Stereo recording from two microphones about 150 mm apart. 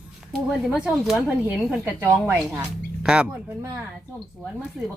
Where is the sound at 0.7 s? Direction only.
5° right (ahead or behind).